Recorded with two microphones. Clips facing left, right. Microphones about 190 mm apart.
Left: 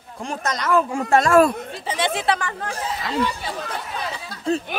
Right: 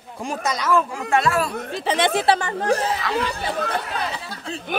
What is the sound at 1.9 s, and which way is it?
Speech, 55° right (ahead or behind).